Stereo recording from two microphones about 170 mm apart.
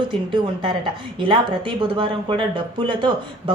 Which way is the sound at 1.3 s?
30° right (ahead or behind).